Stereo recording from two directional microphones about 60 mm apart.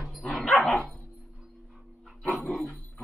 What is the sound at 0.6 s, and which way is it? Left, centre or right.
Dog, left.